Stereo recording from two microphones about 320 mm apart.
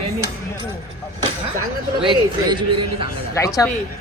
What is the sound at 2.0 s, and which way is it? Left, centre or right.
Speech, centre.